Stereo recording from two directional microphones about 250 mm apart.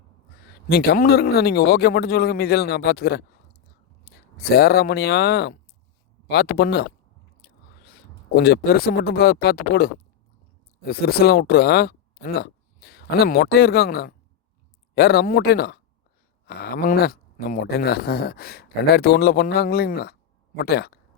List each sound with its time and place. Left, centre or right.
0.4 s speech: left